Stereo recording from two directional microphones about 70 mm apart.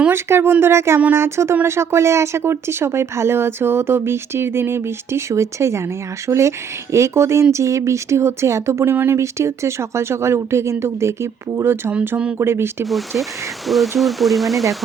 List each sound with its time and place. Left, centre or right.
0.1 s speech: right
13.7 s speech: centre